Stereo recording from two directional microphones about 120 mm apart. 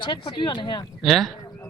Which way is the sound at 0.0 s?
40° left (ahead or behind).